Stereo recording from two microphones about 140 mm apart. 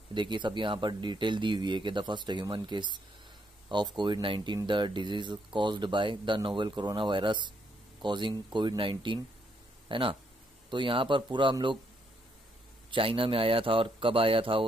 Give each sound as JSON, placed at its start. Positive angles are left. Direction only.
{"t": 0.1, "sound": "speech", "side_deg": -35}
{"t": 12.9, "sound": "speech", "side_deg": -40}